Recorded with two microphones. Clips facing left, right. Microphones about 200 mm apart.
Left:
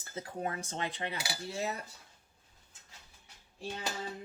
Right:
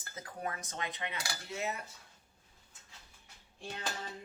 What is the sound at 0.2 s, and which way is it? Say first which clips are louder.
Speech: left 4 dB; 30° left (ahead or behind).